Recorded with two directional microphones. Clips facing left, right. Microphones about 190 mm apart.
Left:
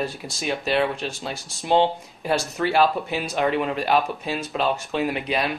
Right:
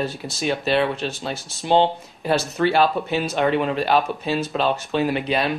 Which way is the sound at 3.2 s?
Centre (ahead or behind).